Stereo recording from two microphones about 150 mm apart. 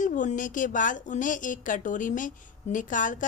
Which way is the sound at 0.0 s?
60° left (ahead or behind).